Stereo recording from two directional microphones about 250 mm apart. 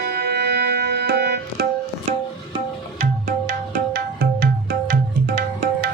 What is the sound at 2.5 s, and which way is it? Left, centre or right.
Music, right.